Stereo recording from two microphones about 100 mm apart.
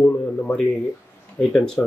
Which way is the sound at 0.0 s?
15° left (ahead or behind).